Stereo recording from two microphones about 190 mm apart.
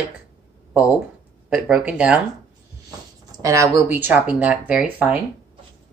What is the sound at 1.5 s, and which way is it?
Speech, 5° right (ahead or behind).